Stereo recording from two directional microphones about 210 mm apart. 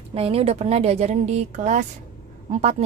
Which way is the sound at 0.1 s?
30° right (ahead or behind).